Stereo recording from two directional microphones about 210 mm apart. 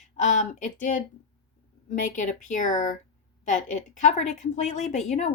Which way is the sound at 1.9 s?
40° left (ahead or behind).